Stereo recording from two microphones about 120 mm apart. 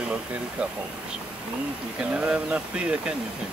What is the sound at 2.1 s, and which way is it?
Speech, 10° right (ahead or behind).